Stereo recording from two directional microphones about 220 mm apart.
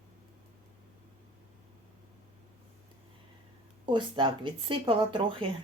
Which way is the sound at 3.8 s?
20° right (ahead or behind).